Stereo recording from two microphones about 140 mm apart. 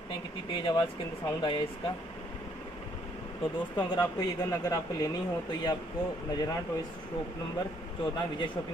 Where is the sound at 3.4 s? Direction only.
30° left (ahead or behind).